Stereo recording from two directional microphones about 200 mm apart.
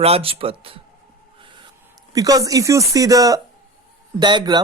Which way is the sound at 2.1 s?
20° right (ahead or behind).